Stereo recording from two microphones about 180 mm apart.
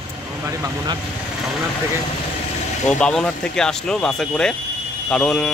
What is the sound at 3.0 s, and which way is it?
Speech, 5° left (ahead or behind).